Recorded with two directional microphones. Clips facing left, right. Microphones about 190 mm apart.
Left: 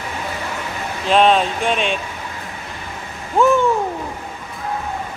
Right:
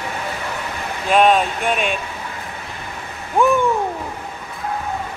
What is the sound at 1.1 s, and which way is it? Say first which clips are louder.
Speech: even; 5° right (ahead or behind).